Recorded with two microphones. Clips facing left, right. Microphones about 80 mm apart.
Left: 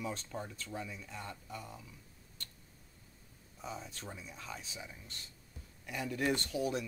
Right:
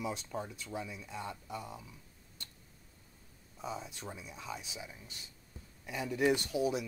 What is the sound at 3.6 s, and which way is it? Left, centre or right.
Speech, centre.